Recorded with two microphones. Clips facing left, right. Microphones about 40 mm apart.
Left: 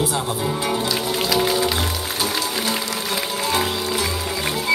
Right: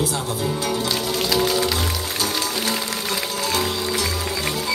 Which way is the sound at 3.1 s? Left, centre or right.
Left.